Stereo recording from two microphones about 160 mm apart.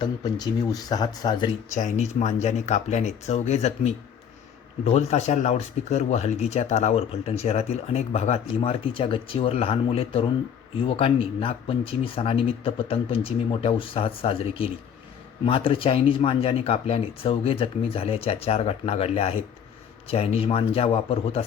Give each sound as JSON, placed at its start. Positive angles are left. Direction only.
{"t": 0.0, "sound": "speech", "side_deg": 25}
{"t": 1.7, "sound": "speech", "side_deg": 45}
{"t": 4.9, "sound": "speech", "side_deg": 45}